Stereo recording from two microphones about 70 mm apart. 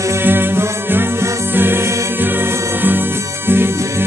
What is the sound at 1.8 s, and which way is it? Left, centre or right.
Music, right.